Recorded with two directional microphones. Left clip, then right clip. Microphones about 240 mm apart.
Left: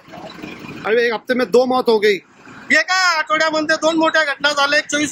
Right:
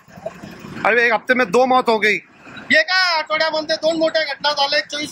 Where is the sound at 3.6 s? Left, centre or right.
Left.